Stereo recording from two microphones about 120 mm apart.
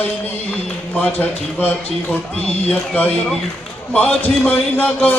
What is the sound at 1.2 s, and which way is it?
Music, 15° left (ahead or behind).